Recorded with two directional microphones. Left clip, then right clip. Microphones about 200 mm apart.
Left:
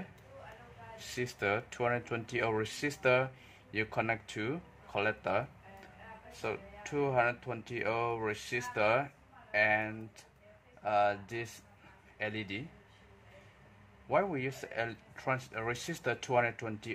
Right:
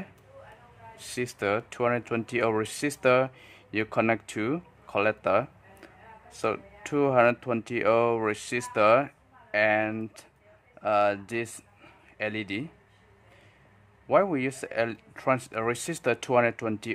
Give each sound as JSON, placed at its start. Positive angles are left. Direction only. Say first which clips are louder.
{"t": 0.9, "sound": "speech", "louder": "right 5 dB", "side_deg": -20}
{"t": 14.0, "sound": "speech", "louder": "right 8 dB", "side_deg": -25}